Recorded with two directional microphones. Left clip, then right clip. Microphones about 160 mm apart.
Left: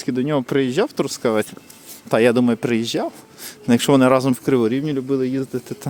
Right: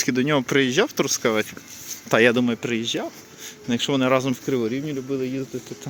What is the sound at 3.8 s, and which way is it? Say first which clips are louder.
Speech: left 7 dB; 60° left (ahead or behind).